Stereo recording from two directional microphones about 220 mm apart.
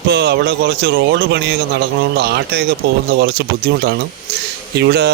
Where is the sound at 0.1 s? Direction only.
50° right (ahead or behind).